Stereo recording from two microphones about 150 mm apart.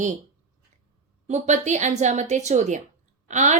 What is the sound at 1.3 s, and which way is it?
A woman's voice, 50° right (ahead or behind).